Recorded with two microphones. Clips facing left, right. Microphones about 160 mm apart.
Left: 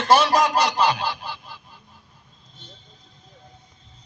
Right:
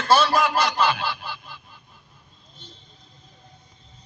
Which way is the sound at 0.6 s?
35° left (ahead or behind).